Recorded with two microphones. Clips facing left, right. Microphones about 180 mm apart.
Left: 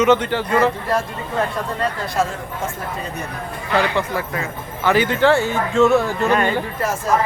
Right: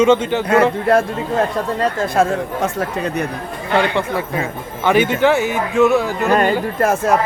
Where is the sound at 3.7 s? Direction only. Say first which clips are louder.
Right 2 dB; 25° right (ahead or behind).